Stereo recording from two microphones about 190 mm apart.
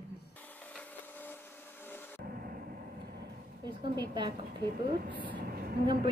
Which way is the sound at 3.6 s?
25° right (ahead or behind).